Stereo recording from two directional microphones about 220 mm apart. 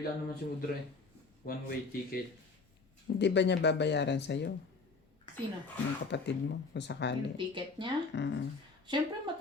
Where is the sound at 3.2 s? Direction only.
50° left (ahead or behind).